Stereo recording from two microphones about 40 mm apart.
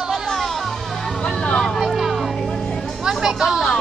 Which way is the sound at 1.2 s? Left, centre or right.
Left.